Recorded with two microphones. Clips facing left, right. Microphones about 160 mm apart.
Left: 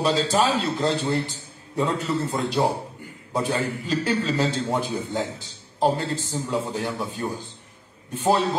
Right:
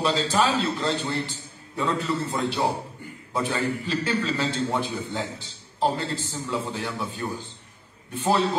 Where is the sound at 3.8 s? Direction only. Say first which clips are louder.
Left 2 dB; 40° left (ahead or behind).